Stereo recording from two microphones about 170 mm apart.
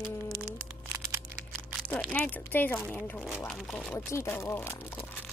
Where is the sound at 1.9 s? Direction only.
10° left (ahead or behind).